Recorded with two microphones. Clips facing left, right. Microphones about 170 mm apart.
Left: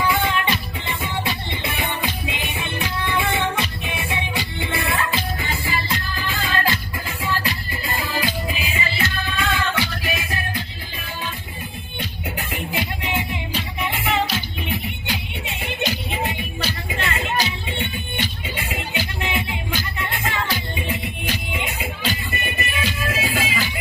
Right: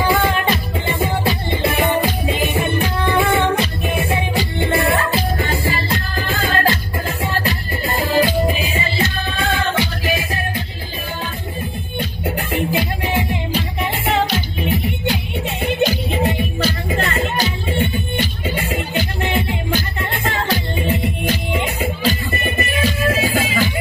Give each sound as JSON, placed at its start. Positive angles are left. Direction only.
{"t": 0.0, "sound": "music", "side_deg": -45}
{"t": 12.5, "sound": "music", "side_deg": -55}
{"t": 13.3, "sound": "music", "side_deg": -40}
{"t": 15.4, "sound": "music", "side_deg": -40}